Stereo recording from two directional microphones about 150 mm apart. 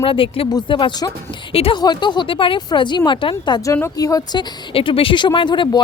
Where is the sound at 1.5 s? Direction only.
40° left (ahead or behind).